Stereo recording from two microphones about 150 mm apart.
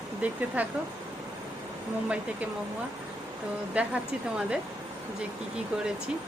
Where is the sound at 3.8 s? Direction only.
10° right (ahead or behind).